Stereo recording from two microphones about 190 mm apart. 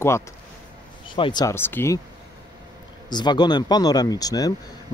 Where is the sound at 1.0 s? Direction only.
25° left (ahead or behind).